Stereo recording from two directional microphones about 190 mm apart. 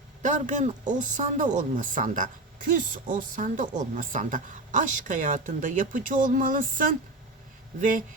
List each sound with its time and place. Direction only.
0.2 s speech: 40° right (ahead or behind)